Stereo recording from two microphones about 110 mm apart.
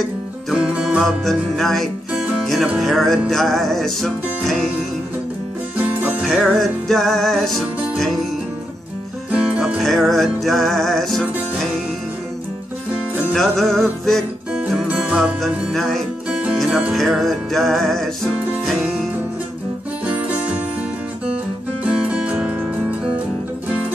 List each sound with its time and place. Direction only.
0.5 s music: 5° right (ahead or behind)
6.2 s music: 5° left (ahead or behind)
9.3 s music: 10° right (ahead or behind)
13.3 s music: 5° left (ahead or behind)
20.1 s music: 10° right (ahead or behind)
21.8 s music: 10° right (ahead or behind)